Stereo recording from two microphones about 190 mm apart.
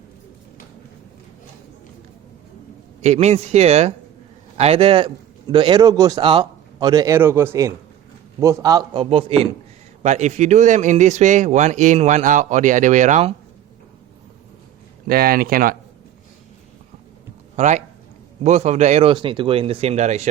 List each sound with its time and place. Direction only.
3.0 s a man's voice: 35° right (ahead or behind)
15.0 s speech: 50° right (ahead or behind)
17.6 s speech: 40° right (ahead or behind)